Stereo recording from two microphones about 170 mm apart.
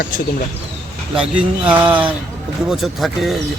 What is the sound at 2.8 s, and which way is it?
Speech, centre (ahead or behind).